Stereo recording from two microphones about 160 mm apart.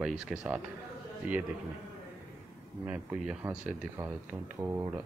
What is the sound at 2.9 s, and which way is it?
Speech, 10° right (ahead or behind).